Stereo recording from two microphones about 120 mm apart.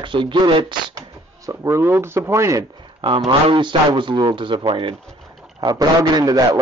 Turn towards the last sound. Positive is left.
turn(degrees=-30)  # may be behind; listen again after turning